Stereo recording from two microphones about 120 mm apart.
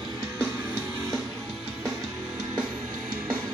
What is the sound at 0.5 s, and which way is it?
Music, 15° right (ahead or behind).